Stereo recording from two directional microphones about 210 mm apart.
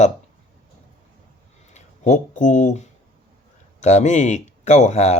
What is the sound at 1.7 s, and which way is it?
Speech, 35° left (ahead or behind).